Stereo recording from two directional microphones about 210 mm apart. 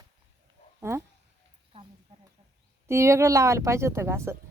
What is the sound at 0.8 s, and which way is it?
Speech, 10° right (ahead or behind).